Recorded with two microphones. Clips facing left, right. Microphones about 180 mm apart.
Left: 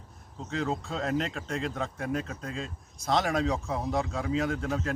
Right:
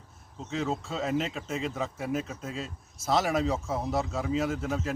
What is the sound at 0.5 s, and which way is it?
Speech, centre (ahead or behind).